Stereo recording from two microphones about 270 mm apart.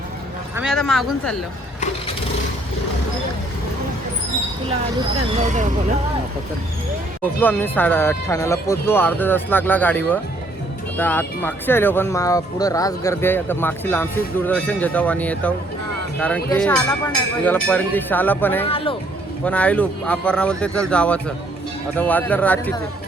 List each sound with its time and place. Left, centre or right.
0.5 s speech: centre
5.4 s speech: right
7.3 s speech: centre
18.6 s speech: centre
19.5 s speech: centre